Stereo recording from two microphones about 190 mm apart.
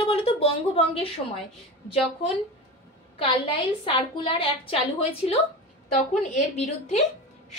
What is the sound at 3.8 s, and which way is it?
A woman's voice, 25° left (ahead or behind).